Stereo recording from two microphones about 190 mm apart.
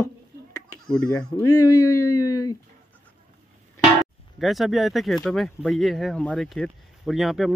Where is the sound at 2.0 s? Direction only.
20° left (ahead or behind).